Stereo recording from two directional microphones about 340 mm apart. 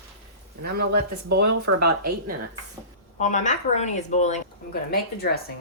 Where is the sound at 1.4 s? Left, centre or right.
Right.